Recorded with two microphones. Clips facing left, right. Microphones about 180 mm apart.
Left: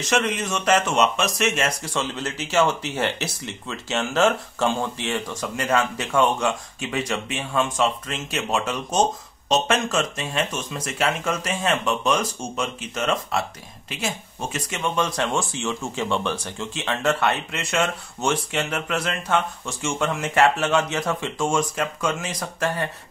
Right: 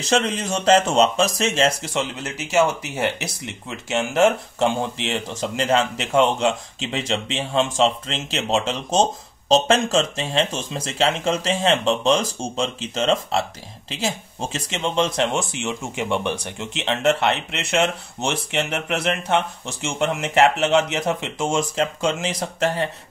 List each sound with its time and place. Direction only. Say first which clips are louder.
0.1 s speech: right 2 dB; 30° right (ahead or behind)
2.1 s speech: right 2 dB; 15° right (ahead or behind)